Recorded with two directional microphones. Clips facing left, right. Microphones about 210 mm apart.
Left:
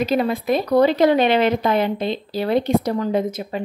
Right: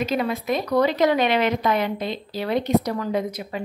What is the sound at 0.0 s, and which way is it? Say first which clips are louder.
A woman's voice: left 4 dB; 30° left (ahead or behind).